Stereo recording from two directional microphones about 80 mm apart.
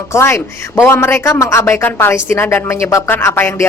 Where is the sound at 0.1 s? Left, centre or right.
Left.